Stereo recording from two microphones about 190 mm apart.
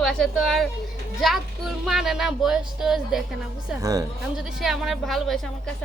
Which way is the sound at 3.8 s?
20° right (ahead or behind).